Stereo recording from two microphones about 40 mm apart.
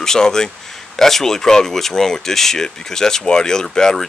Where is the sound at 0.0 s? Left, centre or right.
Centre.